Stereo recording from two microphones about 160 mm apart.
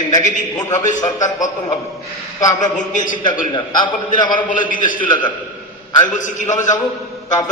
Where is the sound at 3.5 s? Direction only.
30° left (ahead or behind).